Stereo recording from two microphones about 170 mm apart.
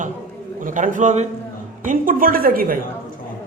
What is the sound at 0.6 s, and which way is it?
A woman's voice, 50° right (ahead or behind).